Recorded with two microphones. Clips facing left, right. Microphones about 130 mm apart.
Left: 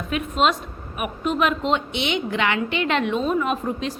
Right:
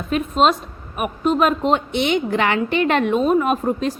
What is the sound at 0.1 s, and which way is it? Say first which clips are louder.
A woman's voice: right 4 dB; 35° right (ahead or behind).